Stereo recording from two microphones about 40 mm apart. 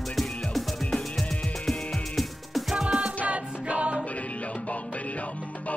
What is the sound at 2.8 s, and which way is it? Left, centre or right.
Music, right.